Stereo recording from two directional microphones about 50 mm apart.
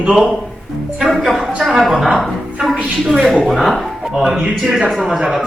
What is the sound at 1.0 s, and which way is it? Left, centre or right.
Speech, centre.